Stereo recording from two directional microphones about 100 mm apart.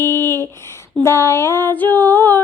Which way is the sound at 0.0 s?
35° right (ahead or behind).